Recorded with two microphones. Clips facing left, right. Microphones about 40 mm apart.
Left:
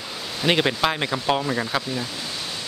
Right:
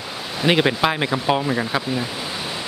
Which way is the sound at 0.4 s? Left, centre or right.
Centre.